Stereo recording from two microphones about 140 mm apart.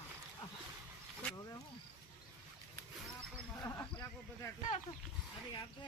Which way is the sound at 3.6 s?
20° left (ahead or behind).